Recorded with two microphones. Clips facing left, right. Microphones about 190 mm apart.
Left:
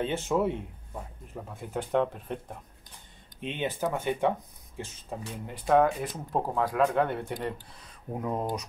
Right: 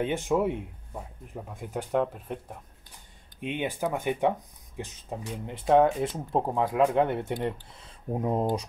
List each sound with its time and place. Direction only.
0.0 s speech: 15° right (ahead or behind)